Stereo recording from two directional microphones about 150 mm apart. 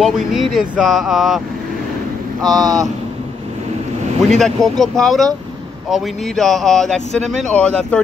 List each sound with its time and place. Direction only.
0.0 s speech: centre (ahead or behind)
2.6 s speech: 25° right (ahead or behind)
4.3 s speech: centre (ahead or behind)